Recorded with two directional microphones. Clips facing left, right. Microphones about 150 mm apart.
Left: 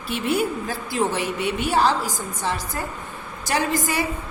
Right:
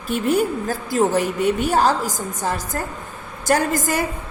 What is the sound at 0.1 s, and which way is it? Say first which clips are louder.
A woman's voice: right 4 dB; 45° right (ahead or behind).